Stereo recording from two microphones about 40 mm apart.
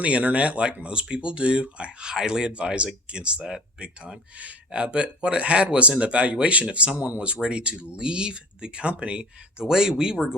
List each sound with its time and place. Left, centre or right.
0.0 s speech: right
2.1 s speech: centre
2.5 s speech: right